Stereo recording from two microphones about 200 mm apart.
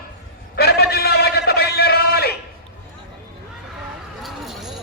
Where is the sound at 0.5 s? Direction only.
55° left (ahead or behind).